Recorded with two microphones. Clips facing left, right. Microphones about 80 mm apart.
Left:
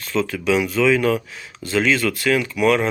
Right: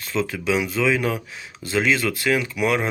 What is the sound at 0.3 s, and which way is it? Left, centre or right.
Speech, centre.